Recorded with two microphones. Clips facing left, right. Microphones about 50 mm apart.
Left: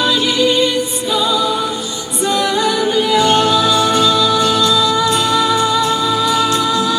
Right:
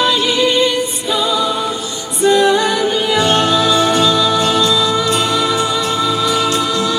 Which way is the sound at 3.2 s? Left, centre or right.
Right.